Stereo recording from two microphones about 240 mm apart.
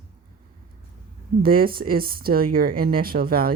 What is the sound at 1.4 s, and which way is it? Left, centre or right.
Speech, right.